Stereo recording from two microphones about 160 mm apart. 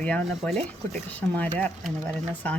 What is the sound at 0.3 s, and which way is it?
Speech, 5° left (ahead or behind).